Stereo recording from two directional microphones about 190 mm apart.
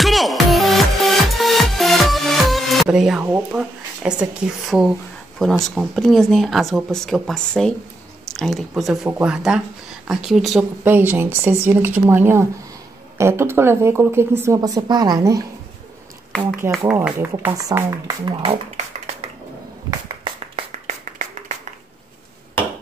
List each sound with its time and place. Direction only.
0.0 s music: centre (ahead or behind)
5.4 s speech: centre (ahead or behind); by 15.4 s 20° right (ahead or behind)
16.9 s speech: 15° right (ahead or behind)
18.2 s speech: 25° right (ahead or behind)
19.9 s finger snapping: 25° right (ahead or behind)
20.8 s a sound: 40° right (ahead or behind)